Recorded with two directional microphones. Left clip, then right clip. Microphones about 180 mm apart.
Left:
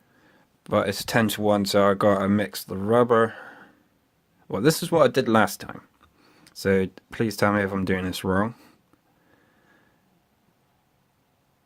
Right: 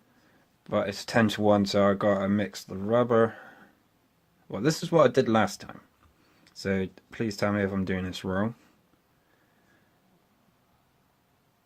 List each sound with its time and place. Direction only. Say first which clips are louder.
0.6 s speech: left 5 dB; 35° left (ahead or behind)